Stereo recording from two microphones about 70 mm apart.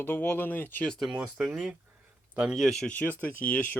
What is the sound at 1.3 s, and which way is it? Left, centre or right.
Speech, right.